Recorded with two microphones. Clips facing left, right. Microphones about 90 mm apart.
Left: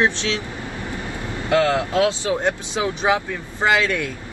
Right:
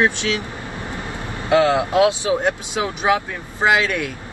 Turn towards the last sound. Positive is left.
turn(degrees=-20)  # may be behind; listen again after turning